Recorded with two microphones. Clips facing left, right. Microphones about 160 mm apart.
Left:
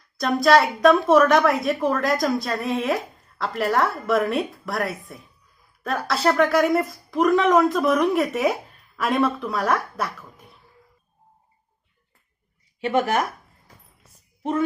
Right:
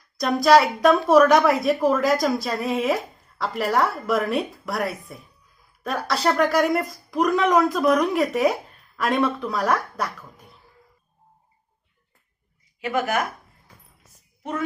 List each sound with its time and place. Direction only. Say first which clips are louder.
0.2 s a woman's voice: right 1 dB; centre (ahead or behind)
12.8 s speech: left 2 dB; 30° left (ahead or behind)